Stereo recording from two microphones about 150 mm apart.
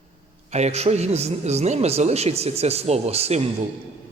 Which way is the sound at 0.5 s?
45° right (ahead or behind).